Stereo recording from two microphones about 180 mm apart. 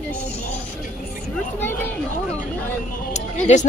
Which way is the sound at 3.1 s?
40° left (ahead or behind).